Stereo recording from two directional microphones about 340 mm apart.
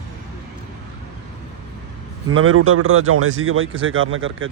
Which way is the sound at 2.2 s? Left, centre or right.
Right.